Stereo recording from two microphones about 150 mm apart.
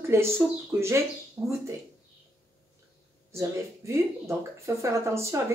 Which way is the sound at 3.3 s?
20° right (ahead or behind).